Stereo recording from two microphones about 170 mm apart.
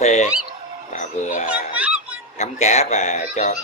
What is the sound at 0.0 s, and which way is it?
Fowl, 45° left (ahead or behind).